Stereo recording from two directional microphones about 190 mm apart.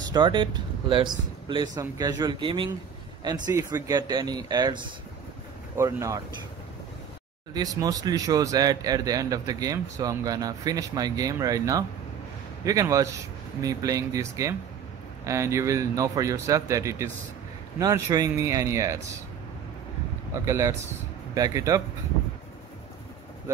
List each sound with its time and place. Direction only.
0.1 s speech: 25° right (ahead or behind)
5.8 s speech: 15° right (ahead or behind)
7.5 s speech: 20° right (ahead or behind)
20.4 s speech: 15° right (ahead or behind)